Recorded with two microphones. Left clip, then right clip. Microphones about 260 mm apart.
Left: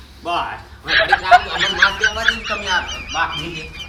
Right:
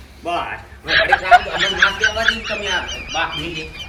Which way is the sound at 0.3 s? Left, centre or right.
Centre.